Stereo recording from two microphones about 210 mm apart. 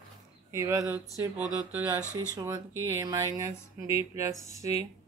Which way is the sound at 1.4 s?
20° left (ahead or behind).